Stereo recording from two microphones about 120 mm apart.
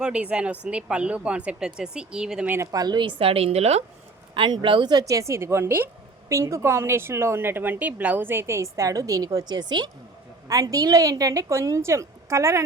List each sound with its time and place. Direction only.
0.0 s speech: 10° right (ahead or behind)
2.7 s a woman's voice: 35° right (ahead or behind); by 3.8 s 60° right (ahead or behind)
4.4 s a woman's voice: 40° right (ahead or behind); by 12.6 s 25° right (ahead or behind)